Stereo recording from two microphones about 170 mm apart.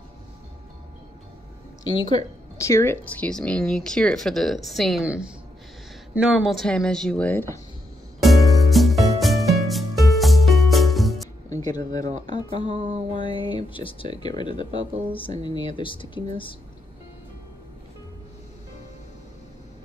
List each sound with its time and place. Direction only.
1.9 s speech: 25° left (ahead or behind)
8.2 s music: centre (ahead or behind)
11.5 s speech: 25° left (ahead or behind)